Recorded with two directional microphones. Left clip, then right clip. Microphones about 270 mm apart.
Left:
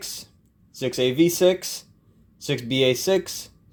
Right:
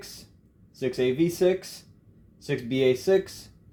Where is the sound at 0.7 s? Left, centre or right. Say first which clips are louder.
Left 3 dB; left.